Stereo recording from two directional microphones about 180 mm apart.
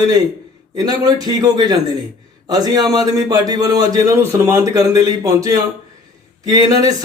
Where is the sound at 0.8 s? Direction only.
20° right (ahead or behind).